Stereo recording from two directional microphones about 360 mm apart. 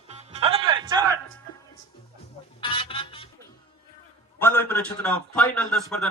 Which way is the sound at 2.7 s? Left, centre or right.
Centre.